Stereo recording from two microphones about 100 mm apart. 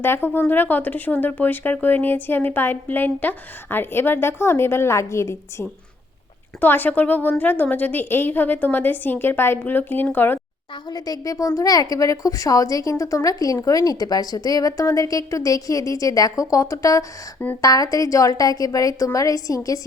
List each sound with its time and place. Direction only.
0.0 s speech: 25° left (ahead or behind)
6.6 s speech: 20° left (ahead or behind)
10.9 s a woman's voice: 40° left (ahead or behind)